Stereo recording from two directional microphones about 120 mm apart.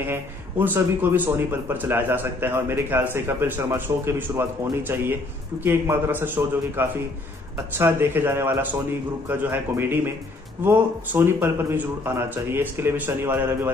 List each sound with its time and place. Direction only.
0.1 s a man's voice: 20° right (ahead or behind)